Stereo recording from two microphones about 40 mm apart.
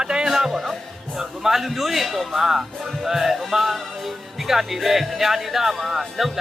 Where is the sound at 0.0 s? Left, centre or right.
Centre.